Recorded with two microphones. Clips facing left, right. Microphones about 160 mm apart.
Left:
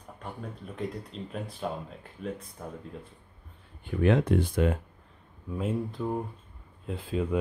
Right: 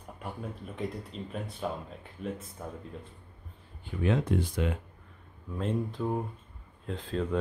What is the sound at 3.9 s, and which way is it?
Speech, 65° left (ahead or behind).